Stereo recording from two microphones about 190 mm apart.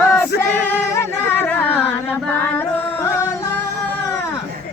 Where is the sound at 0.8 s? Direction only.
10° left (ahead or behind).